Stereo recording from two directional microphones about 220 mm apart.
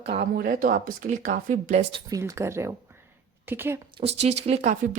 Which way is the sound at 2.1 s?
10° right (ahead or behind).